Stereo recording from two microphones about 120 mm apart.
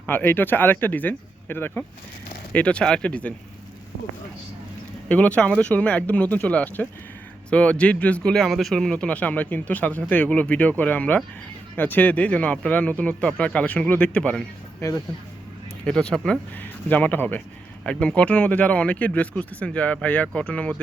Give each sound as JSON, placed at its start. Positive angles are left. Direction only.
{"t": 0.0, "sound": "speech", "side_deg": 15}
{"t": 5.0, "sound": "speech", "side_deg": 10}
{"t": 14.8, "sound": "speech", "side_deg": 25}
{"t": 15.8, "sound": "speech", "side_deg": 5}